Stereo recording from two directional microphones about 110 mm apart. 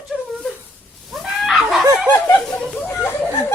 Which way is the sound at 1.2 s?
Centre (ahead or behind).